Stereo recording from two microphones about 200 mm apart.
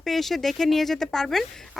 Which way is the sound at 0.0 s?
Centre (ahead or behind).